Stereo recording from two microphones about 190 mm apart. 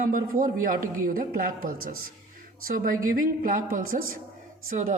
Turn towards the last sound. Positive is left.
turn(degrees=-40)  # may be behind; listen again after turning